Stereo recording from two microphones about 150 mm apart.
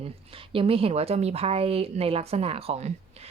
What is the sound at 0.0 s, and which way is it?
Speech, 40° right (ahead or behind).